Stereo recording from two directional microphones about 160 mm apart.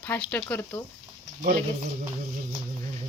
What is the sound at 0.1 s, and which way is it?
Speech, 10° left (ahead or behind).